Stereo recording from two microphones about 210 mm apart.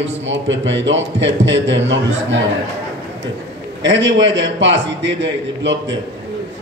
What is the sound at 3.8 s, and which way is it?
Mantra, 60° right (ahead or behind).